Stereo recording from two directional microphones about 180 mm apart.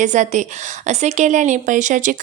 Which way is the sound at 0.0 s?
45° right (ahead or behind).